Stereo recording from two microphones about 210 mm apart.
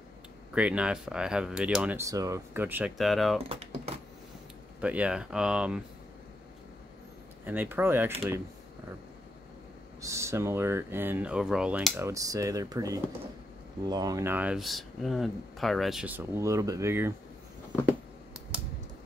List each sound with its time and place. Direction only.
0.6 s speech: 5° right (ahead or behind)
3.4 s typing: 30° right (ahead or behind)
4.7 s speech: 5° right (ahead or behind)
7.4 s speech: 10° right (ahead or behind)
10.0 s speech: 15° right (ahead or behind)